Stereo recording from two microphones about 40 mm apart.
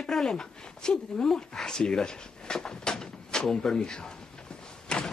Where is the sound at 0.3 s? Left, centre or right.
Centre.